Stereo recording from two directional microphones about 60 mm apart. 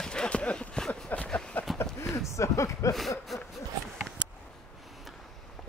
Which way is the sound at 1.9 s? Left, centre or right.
Left.